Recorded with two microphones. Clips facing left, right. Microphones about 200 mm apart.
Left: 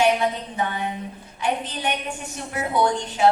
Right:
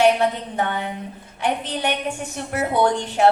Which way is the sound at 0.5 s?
70° right (ahead or behind).